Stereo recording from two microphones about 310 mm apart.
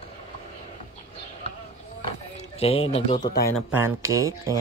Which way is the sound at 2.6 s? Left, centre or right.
Centre.